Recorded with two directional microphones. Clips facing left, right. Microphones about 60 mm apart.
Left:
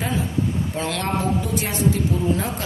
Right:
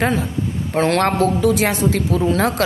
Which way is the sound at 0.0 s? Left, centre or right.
Right.